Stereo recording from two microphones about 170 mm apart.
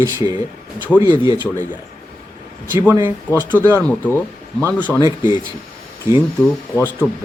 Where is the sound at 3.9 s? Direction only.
10° left (ahead or behind).